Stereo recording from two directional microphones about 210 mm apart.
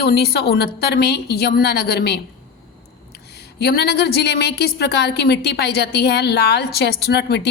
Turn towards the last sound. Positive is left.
turn(degrees=55)  # may be behind; listen again after turning